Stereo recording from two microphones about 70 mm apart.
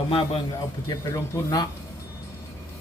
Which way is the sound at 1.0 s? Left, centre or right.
Left.